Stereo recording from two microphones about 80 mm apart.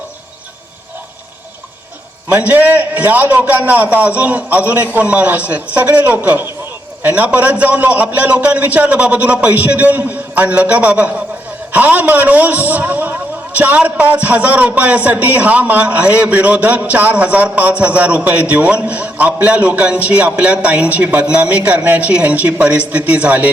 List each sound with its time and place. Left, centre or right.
2.3 s a man's voice: centre